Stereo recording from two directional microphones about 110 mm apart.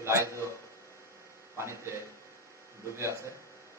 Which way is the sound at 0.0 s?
25° right (ahead or behind).